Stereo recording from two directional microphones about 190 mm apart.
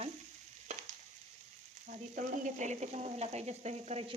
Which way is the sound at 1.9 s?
45° right (ahead or behind).